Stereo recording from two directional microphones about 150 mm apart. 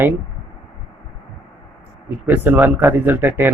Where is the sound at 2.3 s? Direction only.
15° right (ahead or behind).